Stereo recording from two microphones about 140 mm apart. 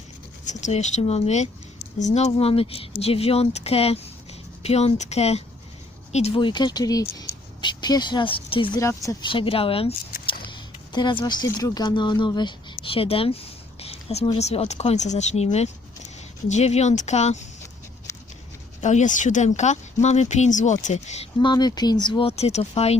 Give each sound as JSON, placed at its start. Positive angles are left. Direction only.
{"t": 0.4, "sound": "speech", "side_deg": 60}
{"t": 8.8, "sound": "speech", "side_deg": 20}
{"t": 9.2, "sound": "speech", "side_deg": 40}
{"t": 18.8, "sound": "speech", "side_deg": 55}
{"t": 21.3, "sound": "speech", "side_deg": 30}
{"t": 22.3, "sound": "speech", "side_deg": 50}